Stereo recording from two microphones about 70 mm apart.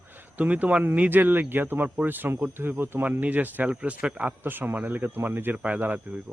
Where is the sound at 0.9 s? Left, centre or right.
Right.